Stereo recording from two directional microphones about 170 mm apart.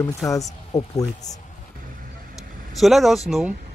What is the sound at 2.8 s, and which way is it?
Speech, centre (ahead or behind).